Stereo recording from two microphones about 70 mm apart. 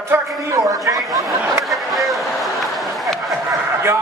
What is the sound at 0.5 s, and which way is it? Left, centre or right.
Speech, right.